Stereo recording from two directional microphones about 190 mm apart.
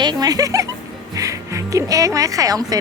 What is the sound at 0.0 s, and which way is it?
Speech, 20° right (ahead or behind).